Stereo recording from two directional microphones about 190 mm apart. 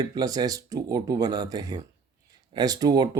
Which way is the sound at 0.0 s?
20° right (ahead or behind).